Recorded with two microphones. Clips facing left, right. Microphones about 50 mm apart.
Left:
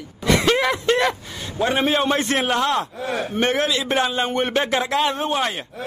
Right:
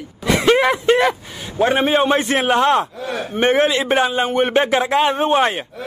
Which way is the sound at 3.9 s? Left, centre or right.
Centre.